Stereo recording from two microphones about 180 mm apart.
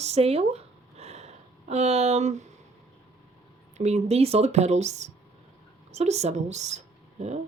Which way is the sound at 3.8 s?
40° right (ahead or behind).